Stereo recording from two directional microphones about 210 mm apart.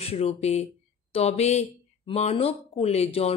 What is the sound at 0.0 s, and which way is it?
A woman's voice, 30° left (ahead or behind).